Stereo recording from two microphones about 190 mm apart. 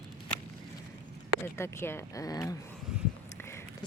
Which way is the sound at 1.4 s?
15° left (ahead or behind).